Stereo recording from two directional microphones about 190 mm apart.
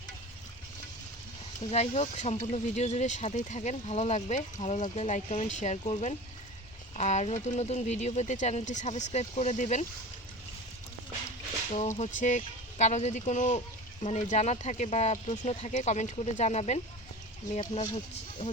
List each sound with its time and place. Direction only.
1.7 s speech: 35° left (ahead or behind)
11.7 s speech: 40° left (ahead or behind)